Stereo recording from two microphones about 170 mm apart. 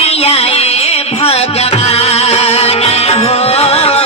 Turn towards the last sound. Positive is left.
turn(degrees=35)  # may be behind; listen again after turning